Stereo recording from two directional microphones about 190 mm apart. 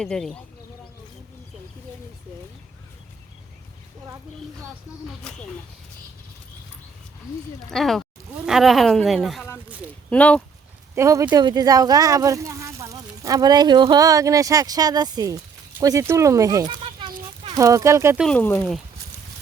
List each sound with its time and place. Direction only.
0.0 s speech: 5° left (ahead or behind)
7.7 s speech: centre (ahead or behind)
10.9 s speech: 15° right (ahead or behind)
18.2 s speech: 5° left (ahead or behind)